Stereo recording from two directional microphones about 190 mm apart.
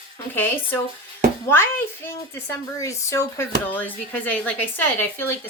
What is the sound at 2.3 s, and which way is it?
Speech, 15° left (ahead or behind).